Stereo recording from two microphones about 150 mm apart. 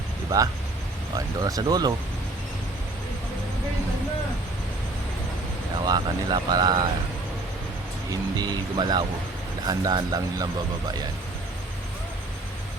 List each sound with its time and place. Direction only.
1.1 s speech: 25° right (ahead or behind)
5.8 s speech: 25° right (ahead or behind)
8.1 s speech: 25° right (ahead or behind)